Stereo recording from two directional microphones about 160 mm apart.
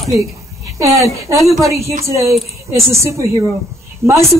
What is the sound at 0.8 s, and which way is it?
A woman's voice, 20° right (ahead or behind).